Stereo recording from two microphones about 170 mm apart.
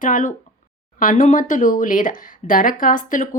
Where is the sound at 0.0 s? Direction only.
50° left (ahead or behind).